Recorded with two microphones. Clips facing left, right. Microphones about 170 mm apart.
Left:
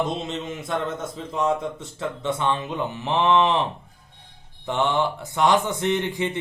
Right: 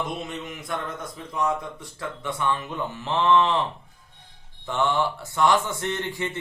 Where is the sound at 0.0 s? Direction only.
25° left (ahead or behind).